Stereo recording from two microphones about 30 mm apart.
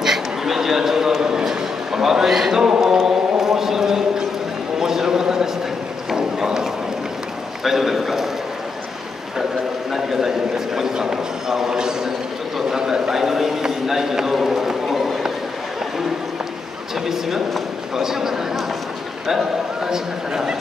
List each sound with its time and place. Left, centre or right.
0.0 s a man's voice: centre
4.7 s clip-clop: centre
6.1 s a sound: centre
7.6 s a man's voice: centre
9.9 s a man's voice: centre
13.1 s a man's voice: centre
13.7 s run: centre
17.0 s a sound: centre
17.9 s a man's voice: centre